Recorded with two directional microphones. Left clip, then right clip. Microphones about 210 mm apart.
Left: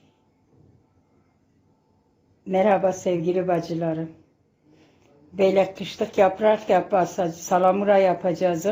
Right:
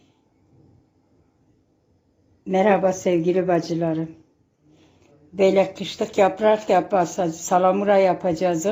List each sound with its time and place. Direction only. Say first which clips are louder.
2.4 s speech: right 1 dB; 15° right (ahead or behind)
5.3 s speech: right 2 dB; 10° right (ahead or behind)